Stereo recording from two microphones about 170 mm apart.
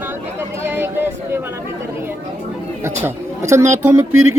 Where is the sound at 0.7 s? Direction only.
10° right (ahead or behind).